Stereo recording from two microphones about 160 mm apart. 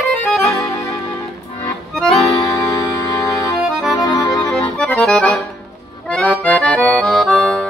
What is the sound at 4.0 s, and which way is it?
Accordion, 25° left (ahead or behind).